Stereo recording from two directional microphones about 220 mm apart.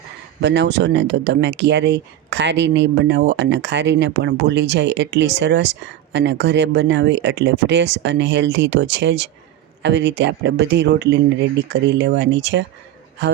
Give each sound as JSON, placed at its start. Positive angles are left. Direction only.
{"t": 0.4, "sound": "speech", "side_deg": -50}